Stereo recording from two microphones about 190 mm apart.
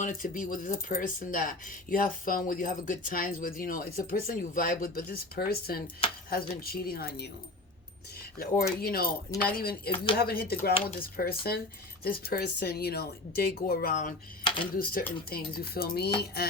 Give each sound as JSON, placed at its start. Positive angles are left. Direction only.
{"t": 0.0, "sound": "speech", "side_deg": 45}
{"t": 8.4, "sound": "speech", "side_deg": 55}
{"t": 14.4, "sound": "computer keyboard", "side_deg": 25}
{"t": 14.8, "sound": "speech", "side_deg": 50}